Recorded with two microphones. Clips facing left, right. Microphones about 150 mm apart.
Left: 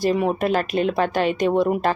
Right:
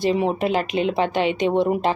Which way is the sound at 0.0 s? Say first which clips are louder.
Even; 20° right (ahead or behind).